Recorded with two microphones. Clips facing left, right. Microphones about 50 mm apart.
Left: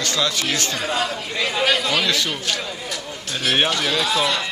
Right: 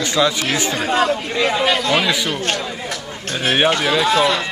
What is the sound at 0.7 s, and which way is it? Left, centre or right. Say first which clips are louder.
Speech: right 6 dB; right.